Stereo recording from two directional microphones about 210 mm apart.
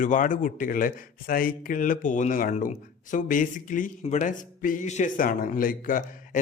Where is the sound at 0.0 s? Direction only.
40° left (ahead or behind).